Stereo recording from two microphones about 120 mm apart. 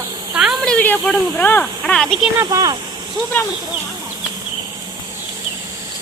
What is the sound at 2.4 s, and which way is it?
Speech, 30° right (ahead or behind).